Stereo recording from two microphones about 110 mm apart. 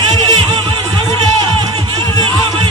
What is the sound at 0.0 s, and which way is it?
Music, 40° right (ahead or behind).